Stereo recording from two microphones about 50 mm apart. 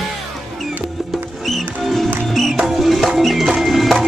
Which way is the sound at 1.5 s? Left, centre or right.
Centre.